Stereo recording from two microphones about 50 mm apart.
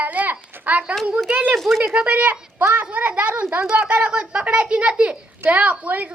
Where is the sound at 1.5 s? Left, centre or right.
Centre.